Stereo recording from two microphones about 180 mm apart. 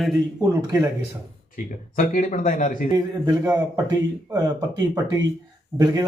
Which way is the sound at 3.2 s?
15° right (ahead or behind).